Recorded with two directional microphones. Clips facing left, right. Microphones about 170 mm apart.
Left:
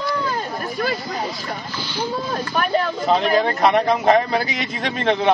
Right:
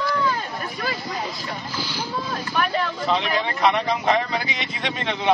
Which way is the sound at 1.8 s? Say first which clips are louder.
Left 3 dB; centre (ahead or behind).